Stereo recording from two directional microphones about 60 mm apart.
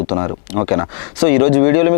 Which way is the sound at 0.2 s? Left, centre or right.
Left.